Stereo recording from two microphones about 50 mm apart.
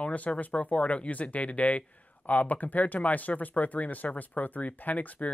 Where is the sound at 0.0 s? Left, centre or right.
Left.